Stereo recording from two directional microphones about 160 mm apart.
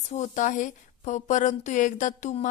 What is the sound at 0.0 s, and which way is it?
Speech, 45° left (ahead or behind).